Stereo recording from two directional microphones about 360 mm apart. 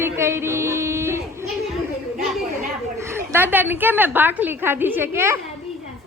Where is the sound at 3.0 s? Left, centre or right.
Centre.